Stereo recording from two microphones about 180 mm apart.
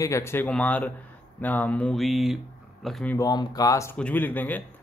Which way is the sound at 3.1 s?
20° left (ahead or behind).